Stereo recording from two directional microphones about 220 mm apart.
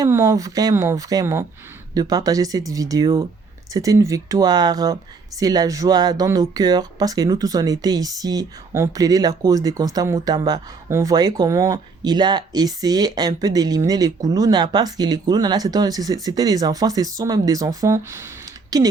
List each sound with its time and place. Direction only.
0.0 s speech: 15° right (ahead or behind)